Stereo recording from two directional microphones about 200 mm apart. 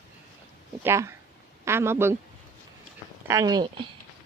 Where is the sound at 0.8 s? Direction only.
15° right (ahead or behind).